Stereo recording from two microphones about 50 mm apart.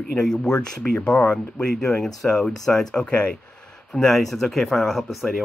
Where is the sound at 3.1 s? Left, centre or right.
Left.